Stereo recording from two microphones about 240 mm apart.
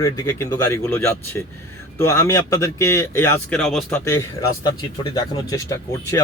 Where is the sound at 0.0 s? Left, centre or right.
Centre.